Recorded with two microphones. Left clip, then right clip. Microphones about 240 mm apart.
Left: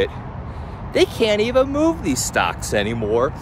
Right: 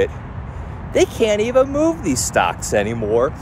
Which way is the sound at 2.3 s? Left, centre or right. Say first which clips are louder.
Right 3 dB; centre.